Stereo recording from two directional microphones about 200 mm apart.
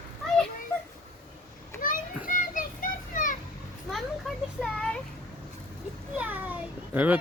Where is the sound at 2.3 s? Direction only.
40° left (ahead or behind).